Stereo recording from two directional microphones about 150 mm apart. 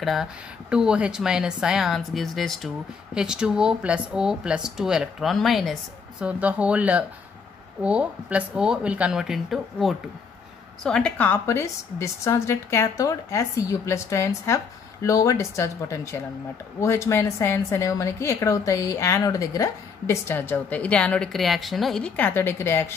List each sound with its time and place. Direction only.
0.0 s a woman's voice: centre (ahead or behind); by 22.9 s 15° left (ahead or behind)